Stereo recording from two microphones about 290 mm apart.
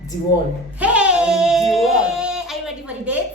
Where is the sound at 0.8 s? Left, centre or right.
Centre.